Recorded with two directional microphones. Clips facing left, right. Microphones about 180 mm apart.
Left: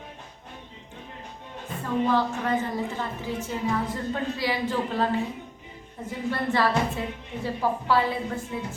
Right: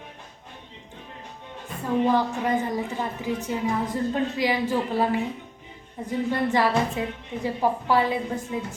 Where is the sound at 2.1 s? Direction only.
15° right (ahead or behind).